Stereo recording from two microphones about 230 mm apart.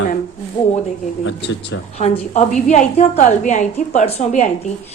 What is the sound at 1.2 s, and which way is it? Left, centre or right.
Speech, left.